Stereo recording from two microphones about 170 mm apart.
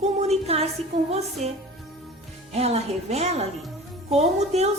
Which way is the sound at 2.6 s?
40° right (ahead or behind).